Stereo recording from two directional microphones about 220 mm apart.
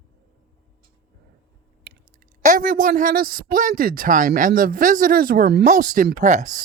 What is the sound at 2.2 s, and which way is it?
Speech, 40° right (ahead or behind).